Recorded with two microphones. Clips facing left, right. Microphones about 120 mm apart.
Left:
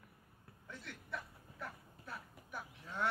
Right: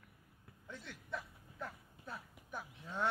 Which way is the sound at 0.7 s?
20° right (ahead or behind).